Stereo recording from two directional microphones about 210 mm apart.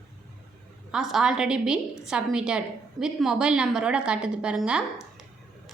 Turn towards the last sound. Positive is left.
turn(degrees=-5)  # may be behind; listen again after turning